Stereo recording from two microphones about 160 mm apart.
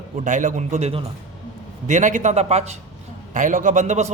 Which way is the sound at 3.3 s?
55° right (ahead or behind).